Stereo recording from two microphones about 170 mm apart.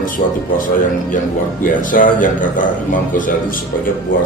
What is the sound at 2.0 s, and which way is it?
Speech, 55° left (ahead or behind).